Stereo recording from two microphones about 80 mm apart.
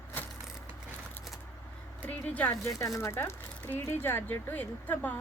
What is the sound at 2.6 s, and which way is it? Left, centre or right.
Speech, left.